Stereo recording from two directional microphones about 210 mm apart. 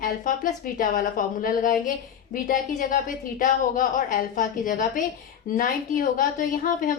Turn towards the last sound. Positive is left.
turn(degrees=40)  # may be behind; listen again after turning